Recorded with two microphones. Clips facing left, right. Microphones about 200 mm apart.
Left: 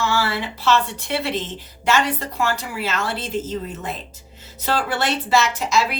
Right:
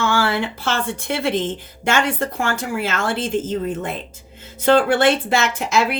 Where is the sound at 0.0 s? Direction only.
55° right (ahead or behind).